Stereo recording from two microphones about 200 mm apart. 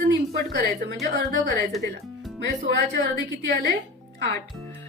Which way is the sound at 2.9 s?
60° right (ahead or behind).